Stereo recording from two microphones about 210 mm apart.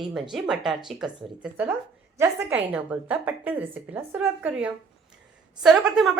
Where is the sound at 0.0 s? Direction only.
Centre (ahead or behind).